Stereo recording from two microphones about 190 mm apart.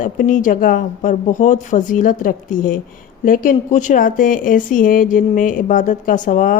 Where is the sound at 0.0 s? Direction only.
40° left (ahead or behind).